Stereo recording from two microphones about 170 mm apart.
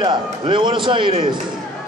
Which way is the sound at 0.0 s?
30° right (ahead or behind).